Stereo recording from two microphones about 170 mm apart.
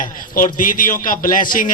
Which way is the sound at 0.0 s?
55° left (ahead or behind).